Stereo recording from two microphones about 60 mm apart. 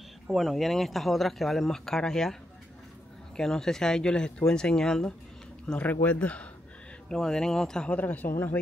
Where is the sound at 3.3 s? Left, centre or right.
Centre.